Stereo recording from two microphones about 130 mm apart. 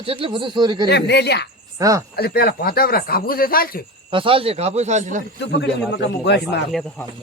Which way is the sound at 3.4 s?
90° left.